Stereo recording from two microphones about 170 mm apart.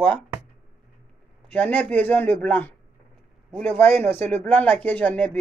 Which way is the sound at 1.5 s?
10° left (ahead or behind).